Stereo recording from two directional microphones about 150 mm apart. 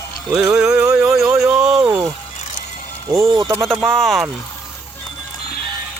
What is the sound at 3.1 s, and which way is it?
Speech, 25° right (ahead or behind).